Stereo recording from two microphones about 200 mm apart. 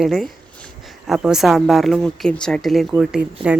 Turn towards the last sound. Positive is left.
turn(degrees=-5)  # may be behind; listen again after turning